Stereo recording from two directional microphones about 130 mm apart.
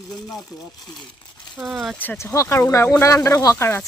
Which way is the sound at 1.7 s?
Centre (ahead or behind).